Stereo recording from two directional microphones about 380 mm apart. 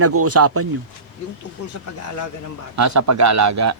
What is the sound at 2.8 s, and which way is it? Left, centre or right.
Speech, right.